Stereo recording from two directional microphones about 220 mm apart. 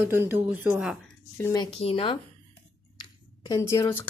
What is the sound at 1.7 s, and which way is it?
Speech, 25° left (ahead or behind).